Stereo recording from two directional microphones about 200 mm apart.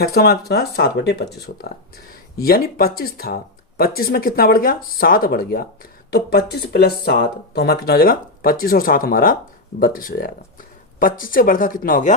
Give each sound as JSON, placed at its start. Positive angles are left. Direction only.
{"t": 0.0, "sound": "speech", "side_deg": 50}